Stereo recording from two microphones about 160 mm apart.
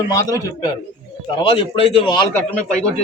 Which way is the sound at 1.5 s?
35° left (ahead or behind).